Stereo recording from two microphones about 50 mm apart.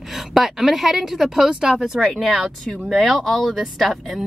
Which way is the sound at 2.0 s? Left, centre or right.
Centre.